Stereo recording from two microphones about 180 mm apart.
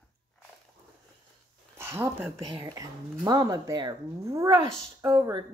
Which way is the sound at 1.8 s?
15° right (ahead or behind).